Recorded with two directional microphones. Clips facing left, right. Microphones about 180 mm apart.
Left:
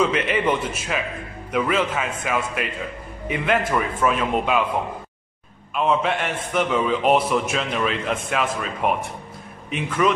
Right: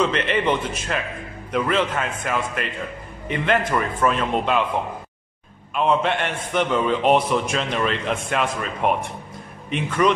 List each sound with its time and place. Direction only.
0.0 s a man's voice: 5° left (ahead or behind)
5.8 s a man's voice: centre (ahead or behind)